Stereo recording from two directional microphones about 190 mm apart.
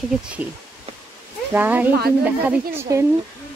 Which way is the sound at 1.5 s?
10° right (ahead or behind).